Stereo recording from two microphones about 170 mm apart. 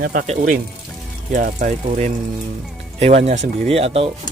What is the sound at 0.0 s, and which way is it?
Speech, 60° right (ahead or behind).